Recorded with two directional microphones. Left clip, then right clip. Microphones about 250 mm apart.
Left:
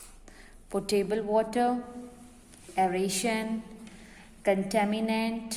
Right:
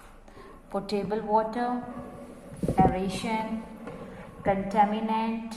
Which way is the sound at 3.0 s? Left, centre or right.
Left.